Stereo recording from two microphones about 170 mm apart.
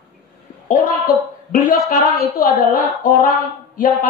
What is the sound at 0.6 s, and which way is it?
Speech, 50° left (ahead or behind).